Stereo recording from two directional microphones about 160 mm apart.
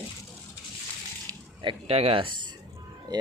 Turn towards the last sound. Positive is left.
turn(degrees=-25)  # may be behind; listen again after turning